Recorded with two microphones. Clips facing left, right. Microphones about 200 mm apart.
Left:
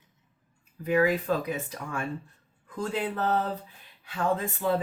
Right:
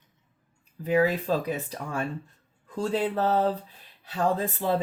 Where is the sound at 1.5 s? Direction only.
35° right (ahead or behind).